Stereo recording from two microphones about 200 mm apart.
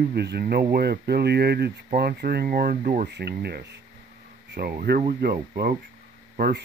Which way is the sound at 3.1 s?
55° right (ahead or behind).